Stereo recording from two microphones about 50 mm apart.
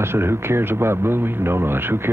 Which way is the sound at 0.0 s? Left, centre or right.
Right.